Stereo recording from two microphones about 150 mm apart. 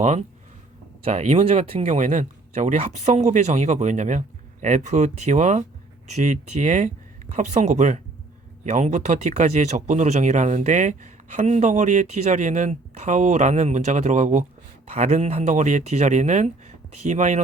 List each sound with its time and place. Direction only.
0.0 s speech: 50° right (ahead or behind)